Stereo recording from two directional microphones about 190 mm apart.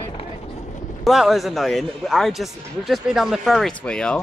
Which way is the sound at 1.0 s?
Centre (ahead or behind).